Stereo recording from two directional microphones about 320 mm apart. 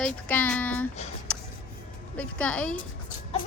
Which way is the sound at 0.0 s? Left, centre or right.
Centre.